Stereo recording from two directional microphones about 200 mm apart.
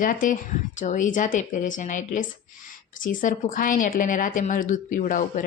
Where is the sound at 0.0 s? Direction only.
40° left (ahead or behind).